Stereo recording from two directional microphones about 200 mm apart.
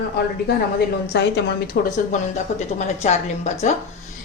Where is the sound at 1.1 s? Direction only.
60° left (ahead or behind).